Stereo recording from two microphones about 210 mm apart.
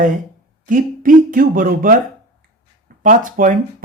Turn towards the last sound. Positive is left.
turn(degrees=-40)  # may be behind; listen again after turning